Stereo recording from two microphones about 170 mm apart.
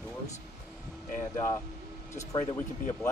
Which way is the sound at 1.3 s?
15° left (ahead or behind).